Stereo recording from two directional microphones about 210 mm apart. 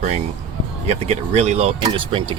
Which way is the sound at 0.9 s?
30° right (ahead or behind).